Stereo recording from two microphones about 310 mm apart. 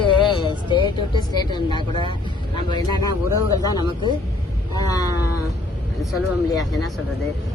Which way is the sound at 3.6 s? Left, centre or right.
Centre.